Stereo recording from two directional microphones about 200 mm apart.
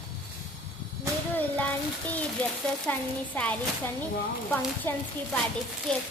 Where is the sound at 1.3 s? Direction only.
10° left (ahead or behind).